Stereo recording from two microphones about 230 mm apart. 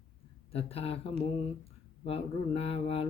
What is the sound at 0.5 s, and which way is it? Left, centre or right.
Speech, left.